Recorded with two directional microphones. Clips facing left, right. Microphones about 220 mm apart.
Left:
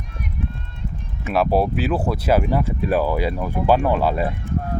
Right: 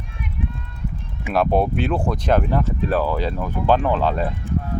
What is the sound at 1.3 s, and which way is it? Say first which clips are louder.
Speech: even; 5° left (ahead or behind).